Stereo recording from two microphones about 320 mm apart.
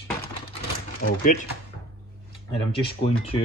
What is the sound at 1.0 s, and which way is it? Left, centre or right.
Speech, left.